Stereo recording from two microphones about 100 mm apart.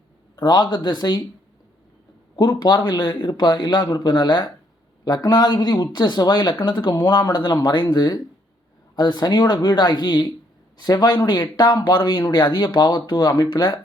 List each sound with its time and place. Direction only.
0.3 s speech: 45° left (ahead or behind)
2.3 s speech: 45° left (ahead or behind)